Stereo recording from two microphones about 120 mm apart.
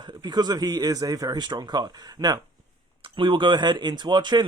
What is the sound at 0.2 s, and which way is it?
Speech, 35° right (ahead or behind).